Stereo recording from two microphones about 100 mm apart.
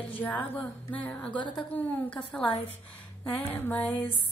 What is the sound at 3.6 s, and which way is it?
Speech, 15° left (ahead or behind).